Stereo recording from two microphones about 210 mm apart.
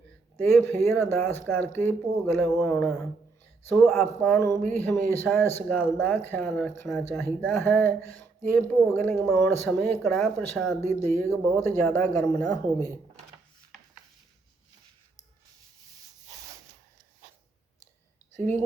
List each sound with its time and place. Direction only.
0.6 s a woman's voice: 10° left (ahead or behind)
18.3 s a woman's voice: 35° right (ahead or behind)